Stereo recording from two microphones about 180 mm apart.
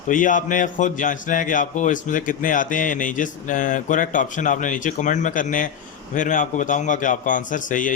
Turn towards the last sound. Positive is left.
turn(degrees=45)  # may be behind; listen again after turning